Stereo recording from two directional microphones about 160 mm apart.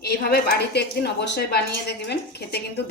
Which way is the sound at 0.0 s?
75° left (ahead or behind).